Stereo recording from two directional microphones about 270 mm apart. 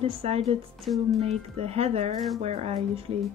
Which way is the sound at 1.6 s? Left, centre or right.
Right.